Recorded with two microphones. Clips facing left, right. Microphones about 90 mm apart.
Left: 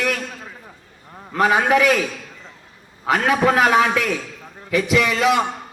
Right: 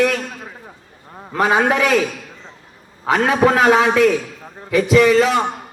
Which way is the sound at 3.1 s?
30° right (ahead or behind).